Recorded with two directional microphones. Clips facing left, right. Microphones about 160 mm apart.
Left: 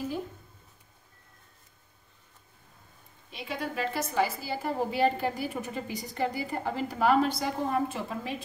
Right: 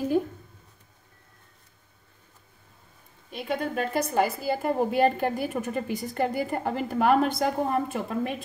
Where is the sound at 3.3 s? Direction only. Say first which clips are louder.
Right 6 dB; 50° right (ahead or behind).